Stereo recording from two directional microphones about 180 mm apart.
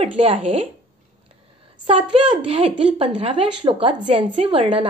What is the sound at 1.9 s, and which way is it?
A woman's voice, 30° right (ahead or behind).